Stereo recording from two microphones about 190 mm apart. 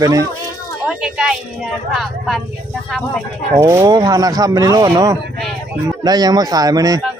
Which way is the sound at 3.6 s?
15° right (ahead or behind).